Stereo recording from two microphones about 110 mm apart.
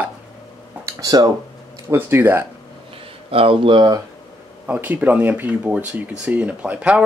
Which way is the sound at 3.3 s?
55° right (ahead or behind).